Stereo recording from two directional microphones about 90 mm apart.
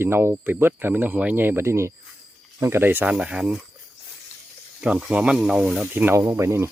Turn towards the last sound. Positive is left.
turn(degrees=-30)  # may be behind; listen again after turning